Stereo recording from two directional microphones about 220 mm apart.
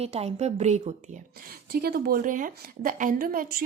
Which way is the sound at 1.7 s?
45° right (ahead or behind).